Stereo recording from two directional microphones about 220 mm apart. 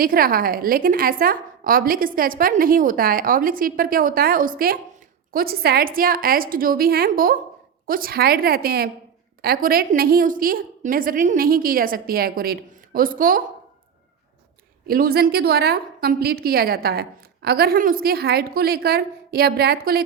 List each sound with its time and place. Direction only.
0.0 s a woman's voice: 40° right (ahead or behind)
14.8 s a woman's voice: 40° right (ahead or behind)